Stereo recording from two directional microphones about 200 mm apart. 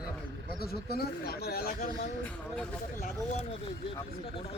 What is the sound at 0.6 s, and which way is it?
Speech, 50° left (ahead or behind).